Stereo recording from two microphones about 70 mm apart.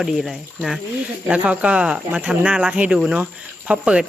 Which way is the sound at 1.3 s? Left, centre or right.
Centre.